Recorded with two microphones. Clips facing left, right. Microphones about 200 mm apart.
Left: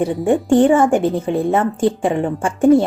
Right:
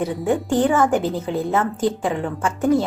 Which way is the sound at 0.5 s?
25° left (ahead or behind).